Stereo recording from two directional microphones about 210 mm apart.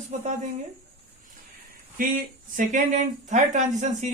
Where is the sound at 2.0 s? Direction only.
40° right (ahead or behind).